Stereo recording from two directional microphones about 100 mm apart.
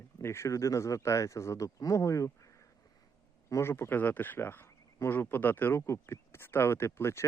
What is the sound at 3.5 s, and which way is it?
Speech, 25° left (ahead or behind).